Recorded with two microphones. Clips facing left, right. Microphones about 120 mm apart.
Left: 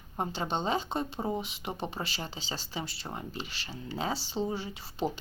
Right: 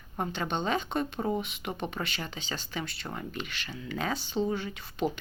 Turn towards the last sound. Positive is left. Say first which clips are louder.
# right 2 dB
turn(degrees=30)  # may be behind; listen again after turning